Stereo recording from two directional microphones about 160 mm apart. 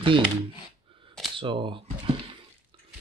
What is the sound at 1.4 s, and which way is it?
Speech, 30° right (ahead or behind).